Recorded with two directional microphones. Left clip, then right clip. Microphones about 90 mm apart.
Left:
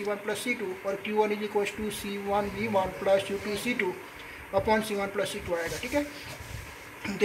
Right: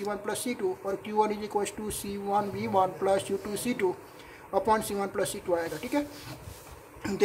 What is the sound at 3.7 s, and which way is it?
Speech, 15° right (ahead or behind).